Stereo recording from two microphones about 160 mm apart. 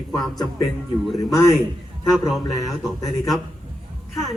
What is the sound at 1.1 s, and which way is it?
Speech, 20° left (ahead or behind).